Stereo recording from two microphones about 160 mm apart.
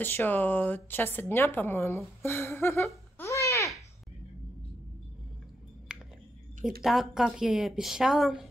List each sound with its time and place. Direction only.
0.0 s speech: 10° left (ahead or behind)
3.2 s babbling: 20° left (ahead or behind)
6.8 s speech: centre (ahead or behind)